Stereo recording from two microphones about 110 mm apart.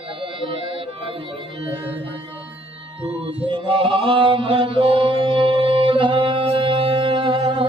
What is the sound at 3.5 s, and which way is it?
Mantra, 55° right (ahead or behind).